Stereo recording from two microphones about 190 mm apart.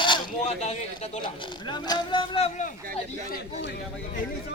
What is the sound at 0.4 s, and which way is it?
Speech, 35° left (ahead or behind).